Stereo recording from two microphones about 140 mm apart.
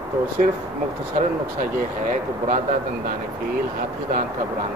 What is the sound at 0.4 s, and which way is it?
Speech, 70° right (ahead or behind).